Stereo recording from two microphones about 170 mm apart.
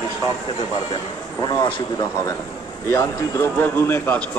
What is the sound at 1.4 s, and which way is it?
A man's voice, 25° left (ahead or behind).